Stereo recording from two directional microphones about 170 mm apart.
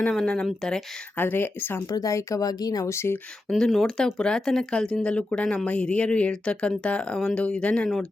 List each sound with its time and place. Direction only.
0.0 s speech: centre (ahead or behind)
3.5 s speech: centre (ahead or behind)